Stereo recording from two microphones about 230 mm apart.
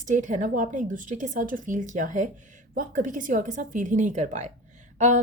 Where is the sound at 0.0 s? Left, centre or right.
Right.